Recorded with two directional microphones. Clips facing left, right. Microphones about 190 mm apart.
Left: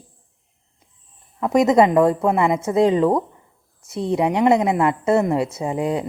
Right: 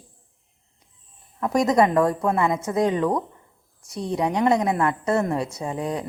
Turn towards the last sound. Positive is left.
turn(degrees=25)  # may be behind; listen again after turning